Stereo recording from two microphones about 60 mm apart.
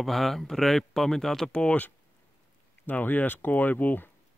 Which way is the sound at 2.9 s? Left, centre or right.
Left.